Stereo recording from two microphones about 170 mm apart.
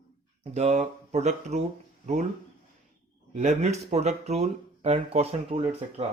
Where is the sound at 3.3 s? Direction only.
45° right (ahead or behind).